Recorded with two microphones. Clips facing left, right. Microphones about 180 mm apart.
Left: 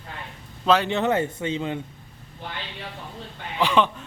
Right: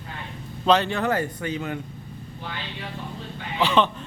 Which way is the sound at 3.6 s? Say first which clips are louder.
Even; 10° left (ahead or behind).